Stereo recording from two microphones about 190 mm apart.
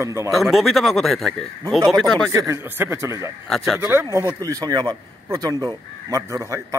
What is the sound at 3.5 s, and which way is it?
Speech, centre (ahead or behind).